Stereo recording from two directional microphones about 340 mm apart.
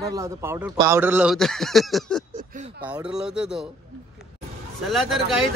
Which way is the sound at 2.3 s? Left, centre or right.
Right.